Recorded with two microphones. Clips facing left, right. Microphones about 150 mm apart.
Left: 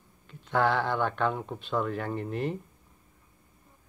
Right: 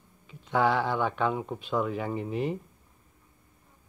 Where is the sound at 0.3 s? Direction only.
5° right (ahead or behind).